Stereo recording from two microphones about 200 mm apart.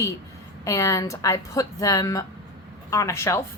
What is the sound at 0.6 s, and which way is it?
Speech, 15° left (ahead or behind).